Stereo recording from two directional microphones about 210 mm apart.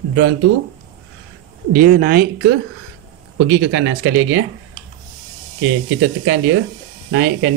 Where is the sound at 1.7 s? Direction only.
45° right (ahead or behind); by 4.4 s 60° right (ahead or behind).